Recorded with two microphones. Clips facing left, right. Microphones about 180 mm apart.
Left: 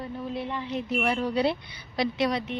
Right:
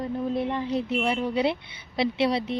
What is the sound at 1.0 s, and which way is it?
Speech, 20° right (ahead or behind).